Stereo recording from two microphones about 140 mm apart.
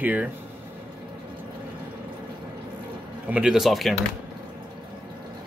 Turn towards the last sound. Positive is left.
turn(degrees=0)  # may be behind; listen again after turning